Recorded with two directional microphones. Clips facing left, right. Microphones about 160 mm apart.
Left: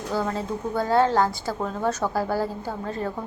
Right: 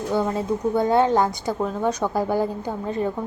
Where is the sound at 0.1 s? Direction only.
20° right (ahead or behind).